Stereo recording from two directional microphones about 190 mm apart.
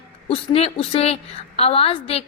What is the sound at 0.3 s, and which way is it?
A woman's voice, 30° left (ahead or behind).